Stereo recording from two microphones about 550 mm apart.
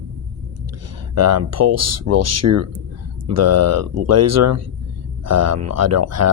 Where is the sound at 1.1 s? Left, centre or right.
Right.